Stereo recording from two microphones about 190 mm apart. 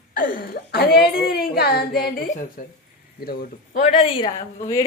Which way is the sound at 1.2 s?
55° left (ahead or behind).